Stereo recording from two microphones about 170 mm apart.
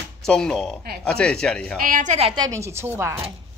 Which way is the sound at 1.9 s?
50° right (ahead or behind).